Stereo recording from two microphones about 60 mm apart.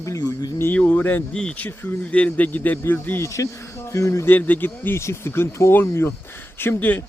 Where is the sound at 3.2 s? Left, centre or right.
Left.